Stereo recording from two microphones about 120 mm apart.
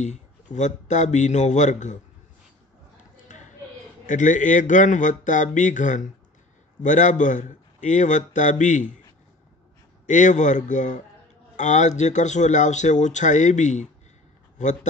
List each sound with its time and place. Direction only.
0.0 s speech: 80° left
4.0 s a man's voice: 90° left
10.0 s a man's voice: 90° left